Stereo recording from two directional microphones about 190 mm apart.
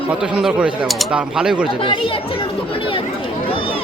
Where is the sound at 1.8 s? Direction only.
30° left (ahead or behind).